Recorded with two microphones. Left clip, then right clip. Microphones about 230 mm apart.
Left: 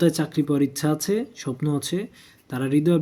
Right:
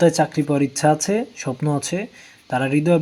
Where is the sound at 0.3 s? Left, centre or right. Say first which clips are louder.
Right 2 dB; centre.